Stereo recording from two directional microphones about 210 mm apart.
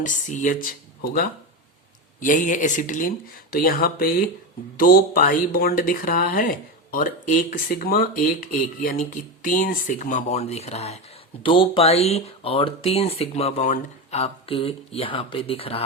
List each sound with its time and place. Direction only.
0.0 s speech: 35° left (ahead or behind)